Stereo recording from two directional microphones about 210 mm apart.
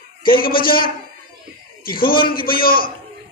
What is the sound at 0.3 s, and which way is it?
A man's voice, 45° left (ahead or behind).